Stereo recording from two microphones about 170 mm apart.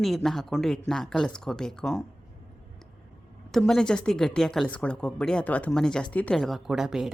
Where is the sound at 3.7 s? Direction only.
5° left (ahead or behind).